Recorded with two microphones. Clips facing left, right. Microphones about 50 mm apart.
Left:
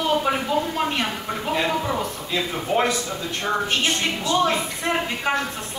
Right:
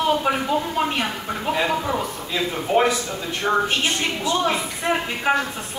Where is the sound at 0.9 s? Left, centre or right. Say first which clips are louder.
Even; centre.